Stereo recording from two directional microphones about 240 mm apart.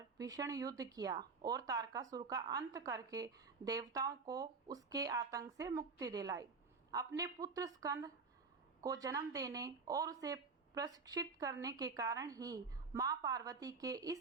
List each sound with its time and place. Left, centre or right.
0.2 s speech: centre